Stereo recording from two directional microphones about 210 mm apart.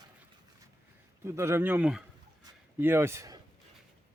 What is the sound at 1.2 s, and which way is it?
Speech, 15° right (ahead or behind).